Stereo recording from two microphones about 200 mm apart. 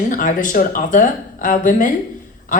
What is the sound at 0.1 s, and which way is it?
A woman's voice, 40° left (ahead or behind).